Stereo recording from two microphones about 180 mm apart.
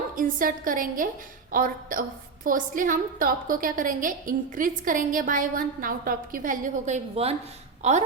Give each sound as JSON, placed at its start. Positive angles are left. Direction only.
{"t": 0.2, "sound": "a woman's voice", "side_deg": -50}